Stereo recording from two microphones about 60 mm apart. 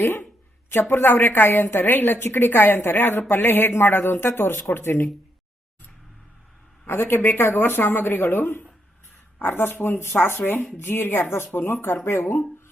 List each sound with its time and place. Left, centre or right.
0.0 s a woman's voice: left
6.8 s a woman's voice: left